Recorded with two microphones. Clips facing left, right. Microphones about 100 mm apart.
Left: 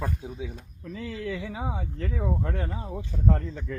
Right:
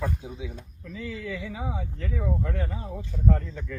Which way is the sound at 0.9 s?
30° left (ahead or behind).